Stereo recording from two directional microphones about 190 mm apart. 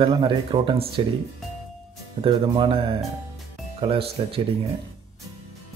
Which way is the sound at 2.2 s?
25° right (ahead or behind).